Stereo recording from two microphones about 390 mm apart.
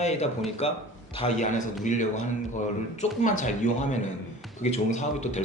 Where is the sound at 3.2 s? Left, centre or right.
Centre.